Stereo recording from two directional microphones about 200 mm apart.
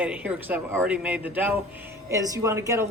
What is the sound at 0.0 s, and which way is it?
Speech, 5° right (ahead or behind).